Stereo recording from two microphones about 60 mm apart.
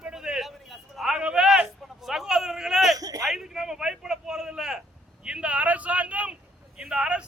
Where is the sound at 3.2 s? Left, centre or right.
Centre.